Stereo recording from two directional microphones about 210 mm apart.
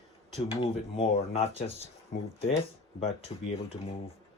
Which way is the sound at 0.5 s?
25° left (ahead or behind).